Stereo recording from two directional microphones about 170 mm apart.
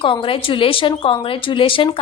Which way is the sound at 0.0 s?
30° left (ahead or behind).